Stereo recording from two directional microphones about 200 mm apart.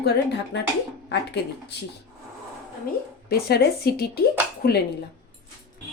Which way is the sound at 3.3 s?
50° left (ahead or behind).